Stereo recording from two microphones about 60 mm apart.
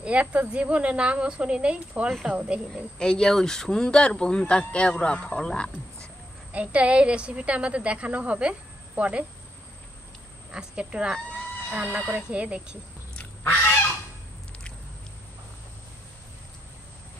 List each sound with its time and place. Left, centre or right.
0.0 s a woman's voice: right
3.0 s speech: centre
6.5 s a woman's voice: right
10.5 s a woman's voice: centre
13.2 s goose: left